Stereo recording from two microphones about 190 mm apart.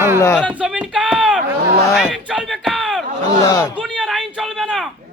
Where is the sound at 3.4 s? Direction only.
20° left (ahead or behind).